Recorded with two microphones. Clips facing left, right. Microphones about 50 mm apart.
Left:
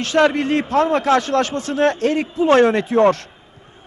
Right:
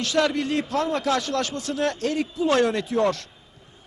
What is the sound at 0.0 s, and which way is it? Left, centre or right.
A man's voice, left.